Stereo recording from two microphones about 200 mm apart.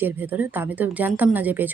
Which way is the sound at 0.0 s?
10° right (ahead or behind).